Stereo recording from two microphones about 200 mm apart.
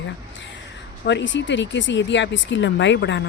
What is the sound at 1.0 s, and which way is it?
Speech, 65° left (ahead or behind).